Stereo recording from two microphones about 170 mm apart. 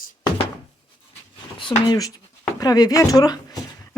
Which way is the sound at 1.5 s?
25° left (ahead or behind).